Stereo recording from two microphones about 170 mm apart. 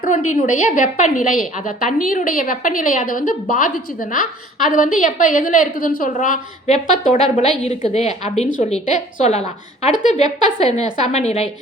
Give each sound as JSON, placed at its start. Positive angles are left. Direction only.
{"t": 0.0, "sound": "a woman's voice", "side_deg": 50}